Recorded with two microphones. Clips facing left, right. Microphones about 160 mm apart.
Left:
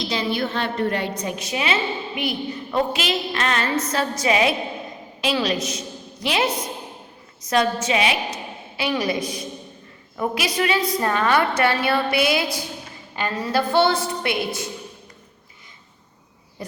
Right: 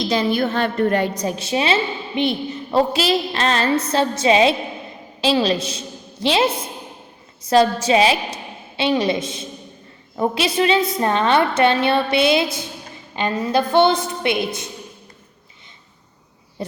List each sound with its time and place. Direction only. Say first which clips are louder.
0.1 s a woman's voice: right 5 dB; 45° right (ahead or behind); by 14.7 s 20° right (ahead or behind)
16.6 s owl: right 6 dB; 25° right (ahead or behind)